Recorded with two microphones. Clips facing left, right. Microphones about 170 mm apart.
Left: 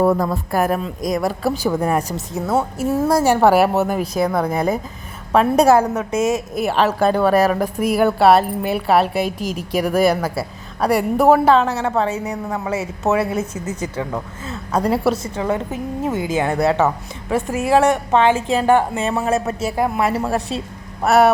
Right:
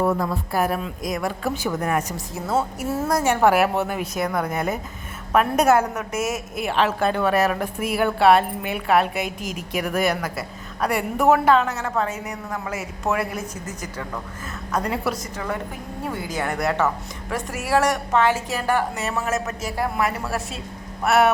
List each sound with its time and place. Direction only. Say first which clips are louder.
0.2 s a woman's voice: left 4 dB; 45° left (ahead or behind)
2.3 s speech: left 4 dB; 15° left (ahead or behind)
3.1 s a woman's voice: left 4 dB; 30° left (ahead or behind)
13.7 s speech: left 8 dB; 10° left (ahead or behind)
14.7 s a woman's voice: left 7 dB; 35° left (ahead or behind)